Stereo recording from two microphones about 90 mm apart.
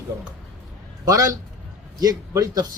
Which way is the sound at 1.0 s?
35° right (ahead or behind).